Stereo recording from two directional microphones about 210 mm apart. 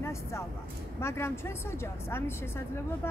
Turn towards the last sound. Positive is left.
turn(degrees=10)  # may be behind; listen again after turning